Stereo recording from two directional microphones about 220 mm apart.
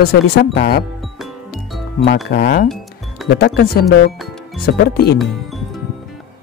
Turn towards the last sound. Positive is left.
turn(degrees=0)  # may be behind; listen again after turning